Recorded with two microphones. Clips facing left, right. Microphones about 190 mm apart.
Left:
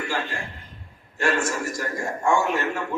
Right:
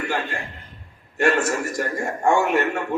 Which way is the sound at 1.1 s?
60° right (ahead or behind).